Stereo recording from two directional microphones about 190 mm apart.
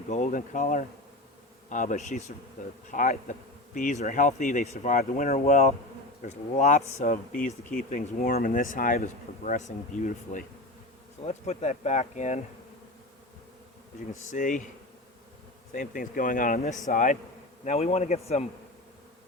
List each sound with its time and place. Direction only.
0.1 s speech: 40° left (ahead or behind)
14.1 s speech: 40° left (ahead or behind)
15.7 s speech: 45° left (ahead or behind)